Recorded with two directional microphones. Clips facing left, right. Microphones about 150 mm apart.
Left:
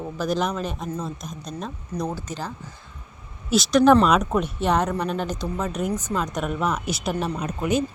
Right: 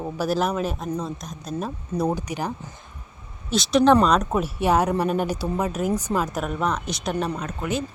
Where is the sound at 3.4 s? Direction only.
Centre (ahead or behind).